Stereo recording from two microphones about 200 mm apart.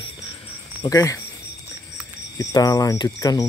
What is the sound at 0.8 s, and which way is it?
Speech, 15° left (ahead or behind).